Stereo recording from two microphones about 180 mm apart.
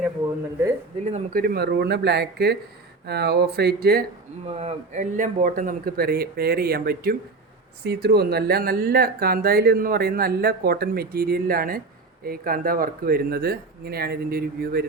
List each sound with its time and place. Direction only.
1.0 s speech: 40° right (ahead or behind)
1.4 s speech: 60° right (ahead or behind)
4.4 s speech: 35° right (ahead or behind); by 14.8 s 55° right (ahead or behind)